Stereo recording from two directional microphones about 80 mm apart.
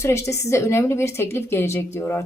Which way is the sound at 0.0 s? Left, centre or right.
Left.